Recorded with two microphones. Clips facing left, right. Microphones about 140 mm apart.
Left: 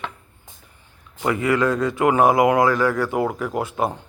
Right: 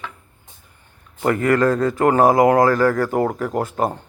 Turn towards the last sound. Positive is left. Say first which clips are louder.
# right 2 dB
turn(degrees=-45)  # may be behind; listen again after turning